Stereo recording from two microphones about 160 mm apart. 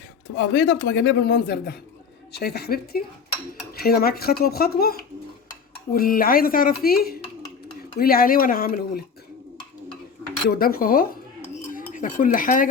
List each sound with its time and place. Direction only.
0.3 s a woman's voice: 90° left; by 9.0 s 65° left (ahead or behind)
10.5 s speech: 70° left (ahead or behind)